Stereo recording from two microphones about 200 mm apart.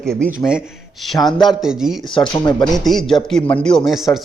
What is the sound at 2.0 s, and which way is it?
Speech, 25° left (ahead or behind).